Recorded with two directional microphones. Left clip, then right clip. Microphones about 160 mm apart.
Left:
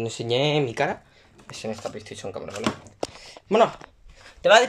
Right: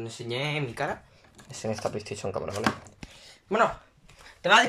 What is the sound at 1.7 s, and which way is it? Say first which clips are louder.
Speech: right 2 dB; centre (ahead or behind).